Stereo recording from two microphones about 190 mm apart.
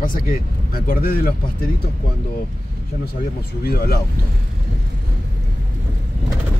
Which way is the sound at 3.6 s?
55° left (ahead or behind).